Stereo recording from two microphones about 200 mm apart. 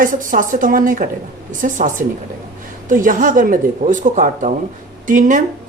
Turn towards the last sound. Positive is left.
turn(degrees=-40)  # may be behind; listen again after turning